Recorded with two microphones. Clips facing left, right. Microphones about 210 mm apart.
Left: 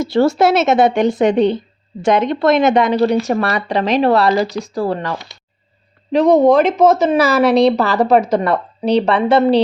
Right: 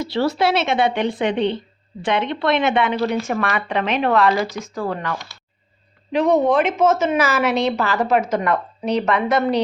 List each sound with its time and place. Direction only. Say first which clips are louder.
0.0 s a woman's voice: left 6 dB; 45° left (ahead or behind); by 9.6 s 30° left (ahead or behind)